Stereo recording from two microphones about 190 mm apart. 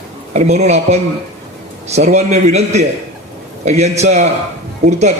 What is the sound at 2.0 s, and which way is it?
A man's voice, 35° right (ahead or behind).